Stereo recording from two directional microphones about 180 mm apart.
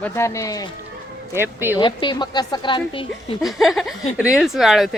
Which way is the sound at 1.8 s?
25° left (ahead or behind).